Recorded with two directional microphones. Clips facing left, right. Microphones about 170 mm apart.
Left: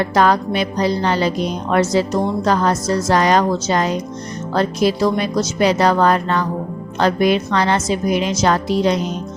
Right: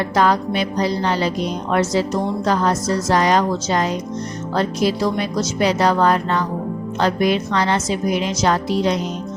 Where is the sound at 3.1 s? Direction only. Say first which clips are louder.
Left 2 dB; 65° left (ahead or behind).